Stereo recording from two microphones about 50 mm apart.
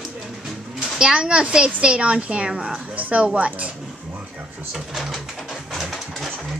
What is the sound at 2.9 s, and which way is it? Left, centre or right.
Speech, right.